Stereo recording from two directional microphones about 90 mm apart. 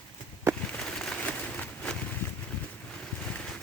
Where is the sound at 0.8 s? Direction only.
5° left (ahead or behind).